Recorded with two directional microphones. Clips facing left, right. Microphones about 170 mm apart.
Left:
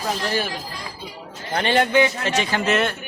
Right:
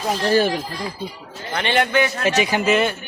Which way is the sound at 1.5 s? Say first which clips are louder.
Left 1 dB; 35° left (ahead or behind).